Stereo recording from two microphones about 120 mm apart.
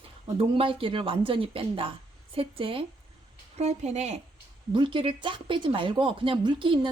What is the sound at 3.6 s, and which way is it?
Speech, 70° right (ahead or behind).